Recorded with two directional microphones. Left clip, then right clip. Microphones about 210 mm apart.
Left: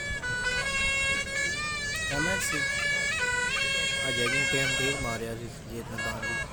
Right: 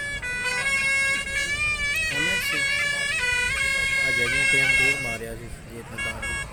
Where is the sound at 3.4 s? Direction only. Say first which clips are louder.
Right 4 dB; 25° right (ahead or behind).